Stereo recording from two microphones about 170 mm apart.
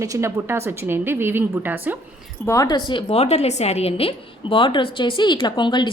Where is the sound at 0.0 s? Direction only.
15° right (ahead or behind).